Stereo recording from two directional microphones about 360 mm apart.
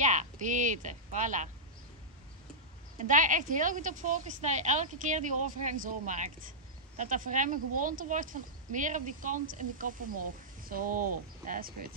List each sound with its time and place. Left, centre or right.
0.0 s speech: centre
3.0 s speech: right